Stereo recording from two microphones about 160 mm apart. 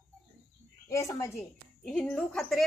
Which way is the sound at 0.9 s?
20° left (ahead or behind).